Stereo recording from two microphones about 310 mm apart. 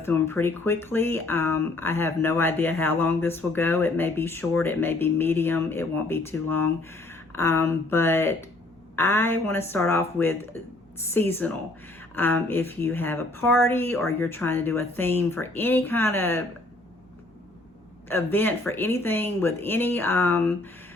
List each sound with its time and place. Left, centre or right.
0.0 s speech: centre
18.1 s speech: centre